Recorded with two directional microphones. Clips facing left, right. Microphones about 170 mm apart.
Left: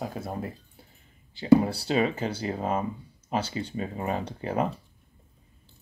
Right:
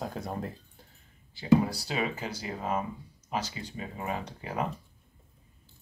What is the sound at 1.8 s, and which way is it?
Speech, 30° left (ahead or behind).